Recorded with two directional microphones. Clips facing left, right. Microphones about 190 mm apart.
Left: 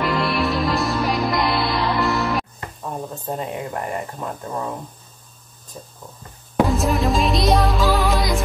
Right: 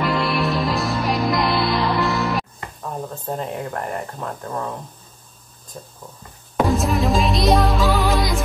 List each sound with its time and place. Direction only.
0.0 s music: centre (ahead or behind)
5.7 s speech: 10° left (ahead or behind)
6.7 s music: centre (ahead or behind)